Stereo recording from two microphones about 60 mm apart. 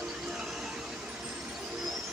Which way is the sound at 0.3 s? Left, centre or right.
Centre.